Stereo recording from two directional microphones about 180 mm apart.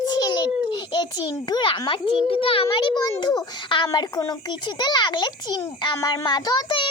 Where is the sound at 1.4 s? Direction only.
25° left (ahead or behind).